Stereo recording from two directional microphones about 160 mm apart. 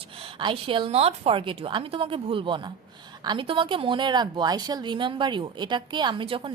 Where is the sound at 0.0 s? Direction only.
35° right (ahead or behind).